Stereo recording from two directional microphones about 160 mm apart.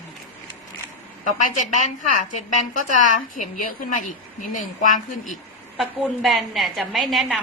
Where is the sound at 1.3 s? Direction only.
50° left (ahead or behind).